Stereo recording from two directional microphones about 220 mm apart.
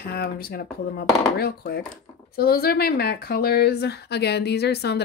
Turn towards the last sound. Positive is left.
turn(degrees=50)  # may be behind; listen again after turning